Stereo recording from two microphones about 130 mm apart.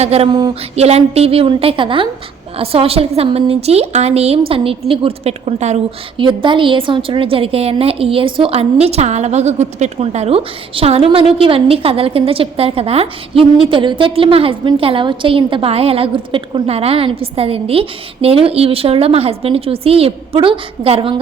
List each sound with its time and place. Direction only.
0.0 s a woman's voice: 50° right (ahead or behind)
6.1 s a woman's voice: 40° right (ahead or behind)